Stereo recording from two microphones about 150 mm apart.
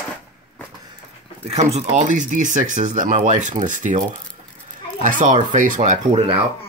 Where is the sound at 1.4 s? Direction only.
45° right (ahead or behind).